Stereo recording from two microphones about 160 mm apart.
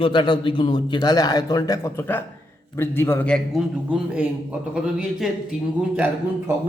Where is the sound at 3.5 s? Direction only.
5° right (ahead or behind).